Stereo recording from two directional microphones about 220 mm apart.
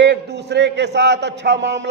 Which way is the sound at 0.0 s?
50° right (ahead or behind).